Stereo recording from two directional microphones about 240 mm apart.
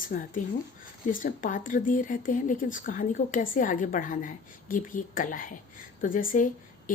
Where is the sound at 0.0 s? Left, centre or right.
Left.